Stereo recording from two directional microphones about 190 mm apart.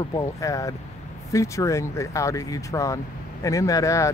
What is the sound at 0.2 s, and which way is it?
Speech, 15° left (ahead or behind).